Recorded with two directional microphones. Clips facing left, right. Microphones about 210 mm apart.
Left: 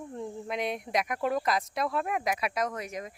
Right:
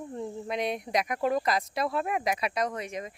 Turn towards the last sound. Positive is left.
turn(degrees=0)  # may be behind; listen again after turning